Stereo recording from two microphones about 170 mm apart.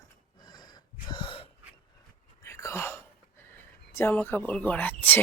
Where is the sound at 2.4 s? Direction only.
15° left (ahead or behind).